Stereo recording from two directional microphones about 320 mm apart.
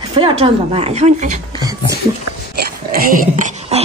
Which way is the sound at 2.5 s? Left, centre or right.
Right.